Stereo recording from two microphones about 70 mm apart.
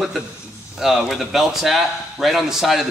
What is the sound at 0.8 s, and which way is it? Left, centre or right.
Speech, centre.